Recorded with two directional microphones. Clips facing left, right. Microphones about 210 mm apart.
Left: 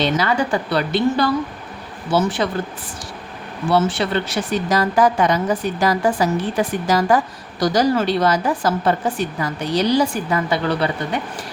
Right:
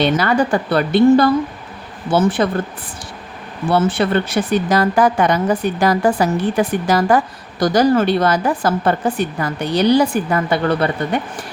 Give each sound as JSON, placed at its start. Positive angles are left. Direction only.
{"t": 0.0, "sound": "speech", "side_deg": -55}
{"t": 3.7, "sound": "speech", "side_deg": -55}